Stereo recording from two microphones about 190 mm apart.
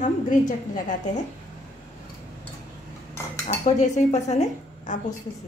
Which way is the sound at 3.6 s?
40° left (ahead or behind).